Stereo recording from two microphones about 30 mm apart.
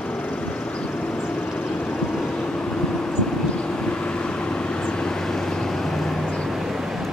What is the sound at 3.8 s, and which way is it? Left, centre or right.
Vehicle, left.